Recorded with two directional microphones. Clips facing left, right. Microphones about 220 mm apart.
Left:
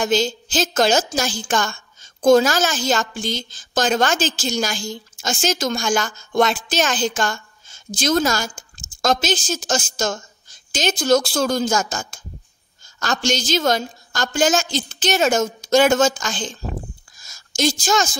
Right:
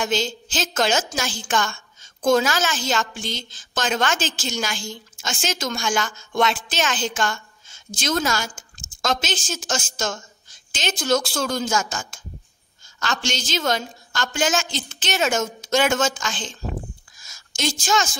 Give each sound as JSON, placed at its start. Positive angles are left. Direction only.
{"t": 0.0, "sound": "a woman's voice", "side_deg": 40}